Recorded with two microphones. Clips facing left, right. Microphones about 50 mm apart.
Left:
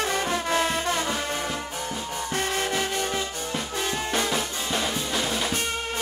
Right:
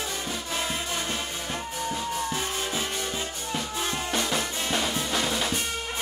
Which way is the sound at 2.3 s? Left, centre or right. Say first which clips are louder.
Left 4 dB; left.